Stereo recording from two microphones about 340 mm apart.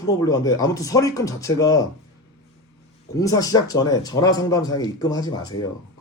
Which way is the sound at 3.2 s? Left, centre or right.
Centre.